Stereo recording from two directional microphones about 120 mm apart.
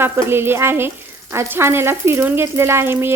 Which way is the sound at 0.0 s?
20° right (ahead or behind).